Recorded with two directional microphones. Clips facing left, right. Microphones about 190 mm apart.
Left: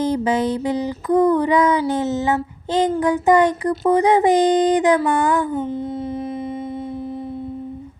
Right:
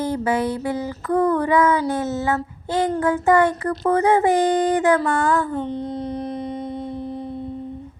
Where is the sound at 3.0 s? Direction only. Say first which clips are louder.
Left 1 dB; 15° left (ahead or behind).